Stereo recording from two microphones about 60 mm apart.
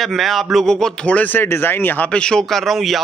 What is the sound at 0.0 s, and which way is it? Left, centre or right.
Speech, centre.